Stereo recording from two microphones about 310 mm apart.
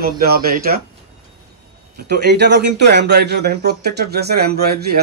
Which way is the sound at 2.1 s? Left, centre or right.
Right.